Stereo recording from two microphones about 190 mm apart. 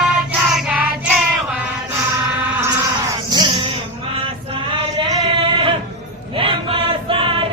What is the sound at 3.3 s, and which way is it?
Music, 25° right (ahead or behind).